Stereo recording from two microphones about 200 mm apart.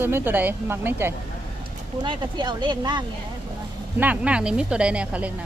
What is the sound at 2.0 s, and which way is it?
Speech, 20° right (ahead or behind).